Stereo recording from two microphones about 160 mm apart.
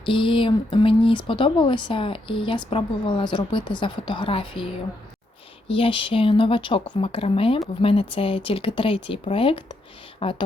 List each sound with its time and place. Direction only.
0.0 s speech: 30° left (ahead or behind)
5.6 s speech: 35° left (ahead or behind)